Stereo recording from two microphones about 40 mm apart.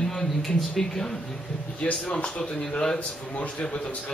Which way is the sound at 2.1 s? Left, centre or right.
Left.